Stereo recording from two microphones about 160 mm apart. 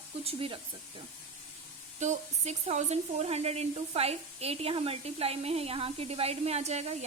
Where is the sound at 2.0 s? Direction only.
45° right (ahead or behind).